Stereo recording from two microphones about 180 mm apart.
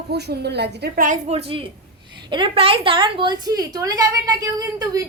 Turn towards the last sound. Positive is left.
turn(degrees=-20)  # may be behind; listen again after turning